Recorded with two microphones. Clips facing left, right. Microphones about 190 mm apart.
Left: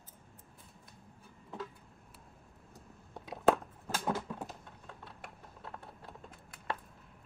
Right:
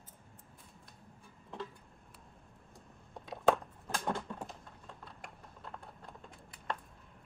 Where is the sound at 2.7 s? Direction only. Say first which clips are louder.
Left 1 dB; centre (ahead or behind).